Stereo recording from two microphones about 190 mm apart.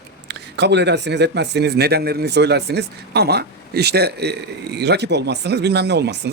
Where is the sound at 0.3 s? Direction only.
65° right (ahead or behind).